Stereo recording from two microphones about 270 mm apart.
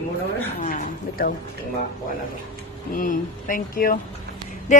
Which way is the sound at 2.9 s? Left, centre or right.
Left.